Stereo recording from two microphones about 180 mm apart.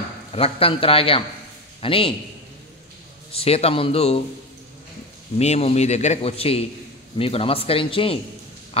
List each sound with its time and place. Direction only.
0.3 s speech: 30° left (ahead or behind)
3.3 s speech: 35° left (ahead or behind)
5.4 s speech: 35° left (ahead or behind)